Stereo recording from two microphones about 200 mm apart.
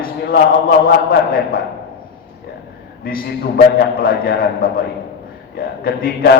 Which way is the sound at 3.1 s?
45° left (ahead or behind).